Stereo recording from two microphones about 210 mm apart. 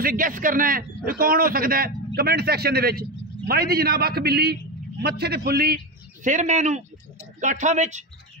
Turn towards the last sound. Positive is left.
turn(degrees=-35)  # may be behind; listen again after turning